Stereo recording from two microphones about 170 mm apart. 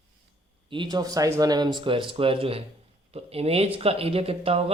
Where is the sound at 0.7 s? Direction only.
25° right (ahead or behind).